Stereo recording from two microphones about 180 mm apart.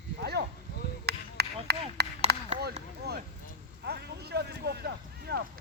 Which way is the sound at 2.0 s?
65° right (ahead or behind).